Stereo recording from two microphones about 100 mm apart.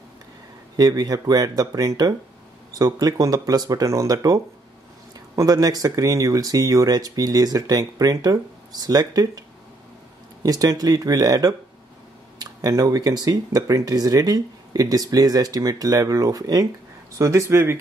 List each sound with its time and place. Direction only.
0.7 s speech: 40° right (ahead or behind)
10.4 s speech: 35° right (ahead or behind)